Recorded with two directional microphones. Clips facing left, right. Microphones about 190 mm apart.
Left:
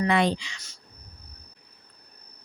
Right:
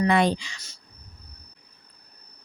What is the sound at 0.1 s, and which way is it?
Speech, 45° right (ahead or behind).